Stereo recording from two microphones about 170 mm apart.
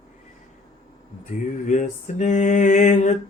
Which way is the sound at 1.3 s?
45° left (ahead or behind).